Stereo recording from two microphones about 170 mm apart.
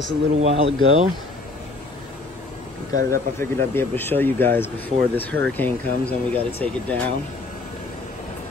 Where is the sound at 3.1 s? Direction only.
15° left (ahead or behind).